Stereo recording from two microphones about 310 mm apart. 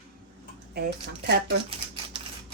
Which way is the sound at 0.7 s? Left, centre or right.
Right.